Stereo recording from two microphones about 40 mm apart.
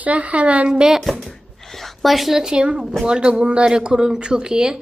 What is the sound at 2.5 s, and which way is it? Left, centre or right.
Speech, centre.